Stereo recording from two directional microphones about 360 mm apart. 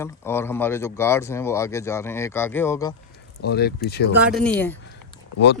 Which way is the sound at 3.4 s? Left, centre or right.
Left.